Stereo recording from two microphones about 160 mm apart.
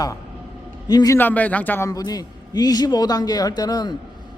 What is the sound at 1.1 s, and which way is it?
Speech, 10° left (ahead or behind).